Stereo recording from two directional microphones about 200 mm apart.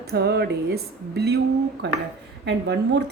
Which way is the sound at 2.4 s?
60° right (ahead or behind).